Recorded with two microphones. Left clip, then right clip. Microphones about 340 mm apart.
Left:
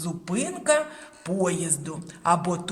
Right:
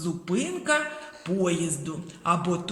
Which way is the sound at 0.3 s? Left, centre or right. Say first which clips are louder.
Left 2 dB; left.